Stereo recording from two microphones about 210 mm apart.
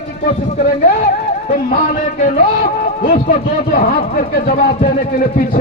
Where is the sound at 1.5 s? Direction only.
40° left (ahead or behind).